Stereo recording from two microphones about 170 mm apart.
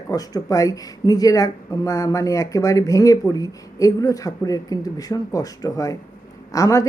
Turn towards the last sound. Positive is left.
turn(degrees=20)  # may be behind; listen again after turning